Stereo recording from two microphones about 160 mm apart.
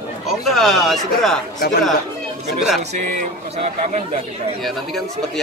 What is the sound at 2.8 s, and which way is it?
A man's voice, 45° right (ahead or behind).